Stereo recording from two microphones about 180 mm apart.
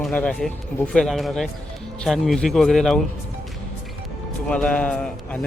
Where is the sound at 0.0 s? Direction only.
5° left (ahead or behind).